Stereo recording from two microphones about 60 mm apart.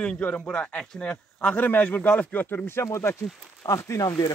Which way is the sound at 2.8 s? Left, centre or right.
Left.